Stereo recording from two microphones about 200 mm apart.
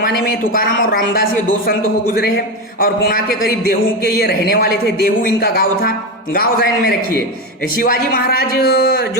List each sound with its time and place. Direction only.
0.0 s speech: 45° left (ahead or behind)